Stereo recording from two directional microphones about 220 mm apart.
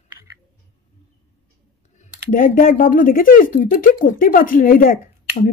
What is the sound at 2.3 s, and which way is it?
Speech, 40° left (ahead or behind).